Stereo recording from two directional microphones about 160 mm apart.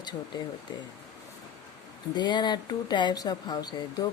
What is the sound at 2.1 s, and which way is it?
Speech, 30° left (ahead or behind).